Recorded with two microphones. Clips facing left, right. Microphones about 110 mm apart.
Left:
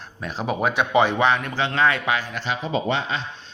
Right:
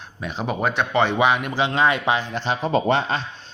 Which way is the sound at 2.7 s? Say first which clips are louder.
Right 4 dB; 45° right (ahead or behind).